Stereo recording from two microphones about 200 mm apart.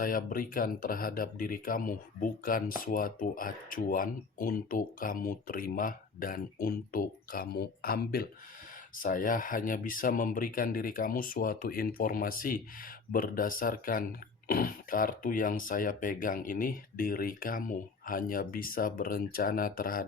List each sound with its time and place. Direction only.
0.0 s speech: 45° left (ahead or behind)